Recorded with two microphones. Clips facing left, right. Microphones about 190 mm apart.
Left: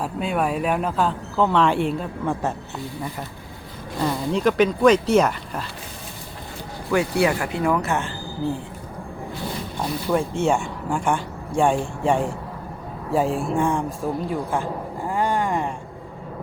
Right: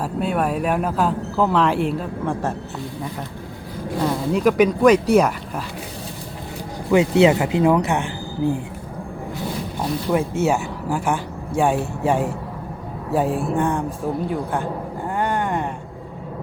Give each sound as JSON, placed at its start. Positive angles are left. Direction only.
{"t": 0.0, "sound": "speech", "side_deg": -5}
{"t": 4.0, "sound": "speech", "side_deg": -5}
{"t": 6.9, "sound": "speech", "side_deg": -20}
{"t": 9.7, "sound": "a man's voice", "side_deg": -5}